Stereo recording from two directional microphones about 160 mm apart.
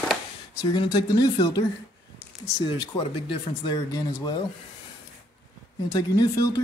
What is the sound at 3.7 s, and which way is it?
Speech, 25° left (ahead or behind).